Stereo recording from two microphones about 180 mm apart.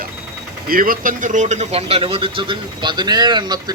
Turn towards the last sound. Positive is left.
turn(degrees=-25)  # may be behind; listen again after turning